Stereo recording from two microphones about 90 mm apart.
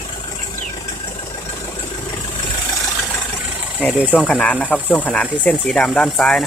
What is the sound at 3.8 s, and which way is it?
Speech, 15° right (ahead or behind).